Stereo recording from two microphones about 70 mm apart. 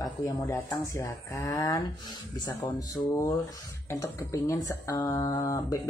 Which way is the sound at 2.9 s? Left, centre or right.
Left.